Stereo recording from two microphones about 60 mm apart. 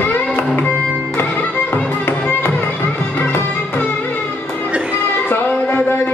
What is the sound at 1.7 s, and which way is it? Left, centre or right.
Music, left.